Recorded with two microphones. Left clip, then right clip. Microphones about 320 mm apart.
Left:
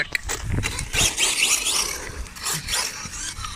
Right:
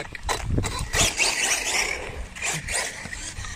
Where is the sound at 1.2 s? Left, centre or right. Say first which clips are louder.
Left 2 dB; right.